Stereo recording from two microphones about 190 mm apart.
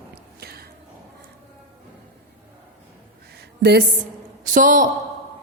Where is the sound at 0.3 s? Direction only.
55° right (ahead or behind).